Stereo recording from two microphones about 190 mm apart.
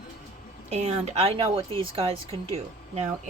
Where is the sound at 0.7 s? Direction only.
35° right (ahead or behind).